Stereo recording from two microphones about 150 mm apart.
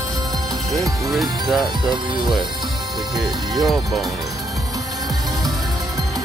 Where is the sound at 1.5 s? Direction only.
Centre (ahead or behind).